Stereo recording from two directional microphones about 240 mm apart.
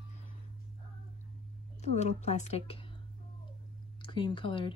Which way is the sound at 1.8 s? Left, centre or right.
Left.